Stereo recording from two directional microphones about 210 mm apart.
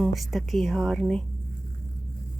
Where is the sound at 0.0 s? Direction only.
Centre (ahead or behind).